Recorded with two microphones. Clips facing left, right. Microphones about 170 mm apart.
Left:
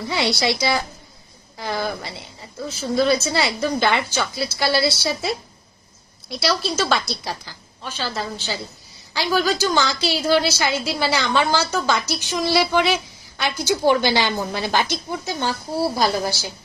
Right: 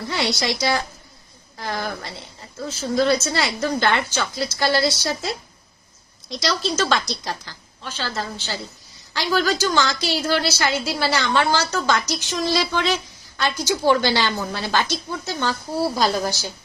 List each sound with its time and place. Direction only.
0.1 s a woman's voice: 15° left (ahead or behind)